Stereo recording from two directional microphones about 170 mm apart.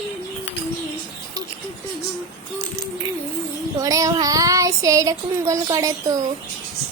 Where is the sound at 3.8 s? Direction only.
20° right (ahead or behind).